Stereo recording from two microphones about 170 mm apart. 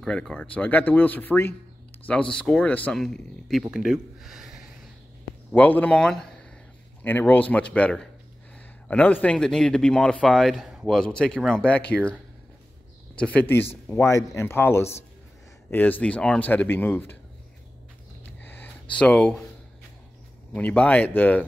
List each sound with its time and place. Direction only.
0.0 s speech: 5° left (ahead or behind)
5.5 s speech: 10° left (ahead or behind)
18.4 s a sound: 10° left (ahead or behind)
20.5 s speech: 10° left (ahead or behind)